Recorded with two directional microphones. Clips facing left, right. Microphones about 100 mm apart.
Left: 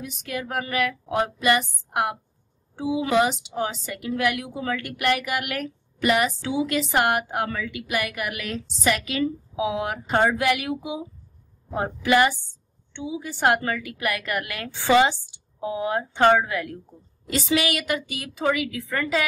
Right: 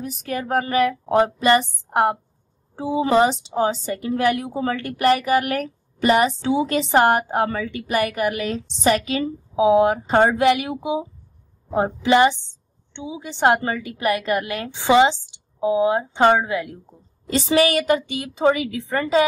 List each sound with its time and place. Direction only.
0.0 s a woman's voice: 40° right (ahead or behind); by 16.7 s 20° right (ahead or behind)
17.3 s a woman's voice: 35° right (ahead or behind)